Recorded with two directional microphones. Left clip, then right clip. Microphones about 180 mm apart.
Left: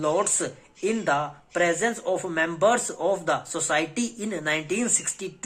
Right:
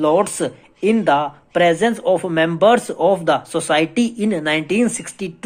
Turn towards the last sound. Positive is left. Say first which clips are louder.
# right 7 dB
turn(degrees=-35)  # may be behind; listen again after turning